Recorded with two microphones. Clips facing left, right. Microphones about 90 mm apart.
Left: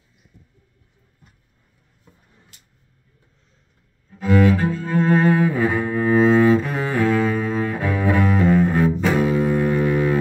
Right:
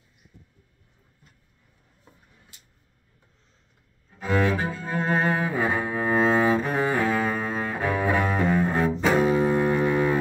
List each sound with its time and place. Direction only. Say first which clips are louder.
4.2 s cello: left 7 dB; 30° right (ahead or behind)
4.7 s cello: left 7 dB; 15° right (ahead or behind)
7.2 s double bass: left 5 dB; 25° right (ahead or behind)
9.1 s music: left 2 dB; 25° right (ahead or behind)